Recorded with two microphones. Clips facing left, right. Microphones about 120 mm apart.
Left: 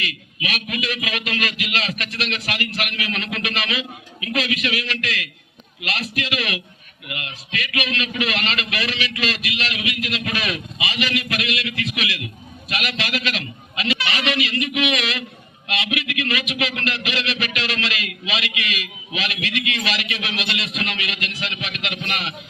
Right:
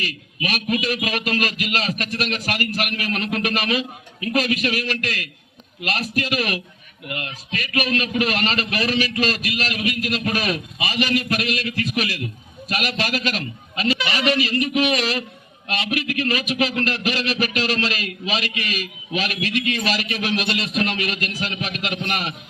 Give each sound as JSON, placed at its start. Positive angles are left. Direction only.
{"t": 0.0, "sound": "a man's voice", "side_deg": -40}